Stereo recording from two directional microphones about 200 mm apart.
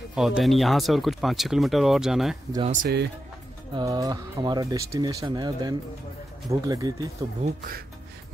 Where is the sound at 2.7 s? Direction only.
50° right (ahead or behind).